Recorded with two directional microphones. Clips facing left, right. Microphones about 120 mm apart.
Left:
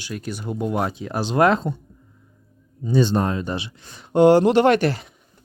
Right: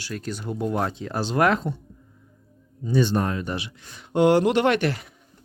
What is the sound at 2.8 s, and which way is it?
Speech, 25° left (ahead or behind).